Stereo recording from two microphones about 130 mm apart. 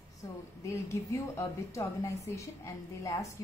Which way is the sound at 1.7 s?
25° left (ahead or behind).